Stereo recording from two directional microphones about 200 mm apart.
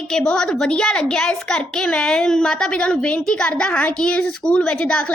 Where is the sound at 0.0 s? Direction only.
5° left (ahead or behind).